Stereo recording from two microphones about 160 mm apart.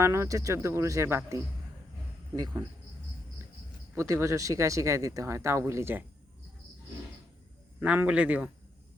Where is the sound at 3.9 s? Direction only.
15° right (ahead or behind).